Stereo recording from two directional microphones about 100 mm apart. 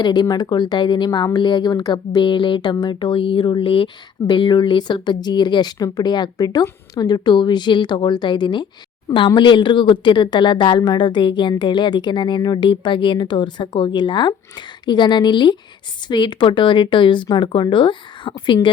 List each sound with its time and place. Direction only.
0.0 s speech: 45° left (ahead or behind); by 3.8 s 60° left (ahead or behind)
4.3 s speech: 50° left (ahead or behind)